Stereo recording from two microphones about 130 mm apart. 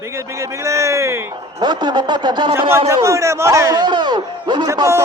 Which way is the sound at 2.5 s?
20° right (ahead or behind).